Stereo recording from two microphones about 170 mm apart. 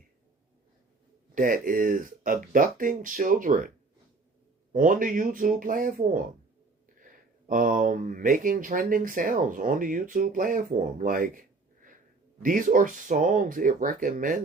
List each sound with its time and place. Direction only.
1.4 s speech: 55° right (ahead or behind)
4.7 s speech: 50° right (ahead or behind)